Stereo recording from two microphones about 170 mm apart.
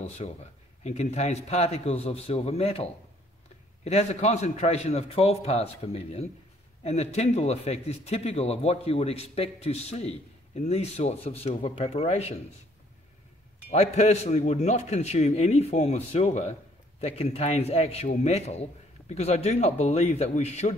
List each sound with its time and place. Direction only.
0.2 s a man's voice: 40° left (ahead or behind)
13.7 s a man's voice: 40° left (ahead or behind)